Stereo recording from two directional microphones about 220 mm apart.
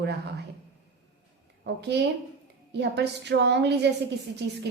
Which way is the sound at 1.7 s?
50° right (ahead or behind).